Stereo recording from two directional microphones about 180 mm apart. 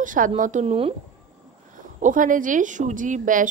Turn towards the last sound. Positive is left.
turn(degrees=-45)  # may be behind; listen again after turning